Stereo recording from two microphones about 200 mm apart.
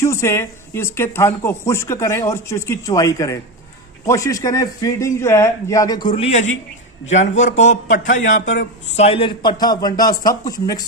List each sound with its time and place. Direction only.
0.0 s a man's voice: 15° left (ahead or behind)